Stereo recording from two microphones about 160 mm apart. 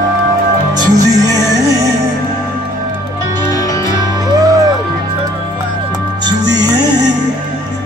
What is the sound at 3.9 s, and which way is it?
Music, 25° right (ahead or behind).